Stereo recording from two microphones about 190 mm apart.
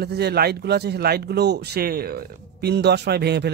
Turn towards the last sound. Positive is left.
turn(degrees=-60)  # may be behind; listen again after turning